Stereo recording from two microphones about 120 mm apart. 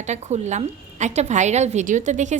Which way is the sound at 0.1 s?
75° right (ahead or behind).